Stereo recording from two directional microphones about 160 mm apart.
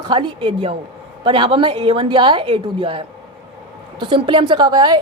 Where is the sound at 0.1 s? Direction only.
30° right (ahead or behind).